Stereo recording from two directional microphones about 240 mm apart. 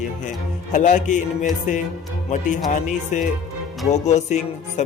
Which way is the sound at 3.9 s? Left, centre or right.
Left.